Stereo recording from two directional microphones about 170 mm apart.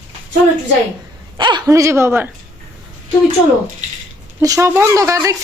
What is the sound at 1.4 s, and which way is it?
Speech, 25° right (ahead or behind).